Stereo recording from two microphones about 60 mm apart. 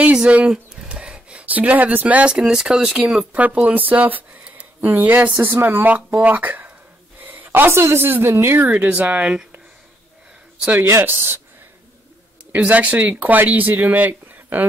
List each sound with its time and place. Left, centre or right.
0.0 s speech: centre
3.3 s speech: right
7.2 s a sound: right
7.7 s a woman's voice: right
8.6 s speech: right
10.8 s speech: right
12.5 s speech: right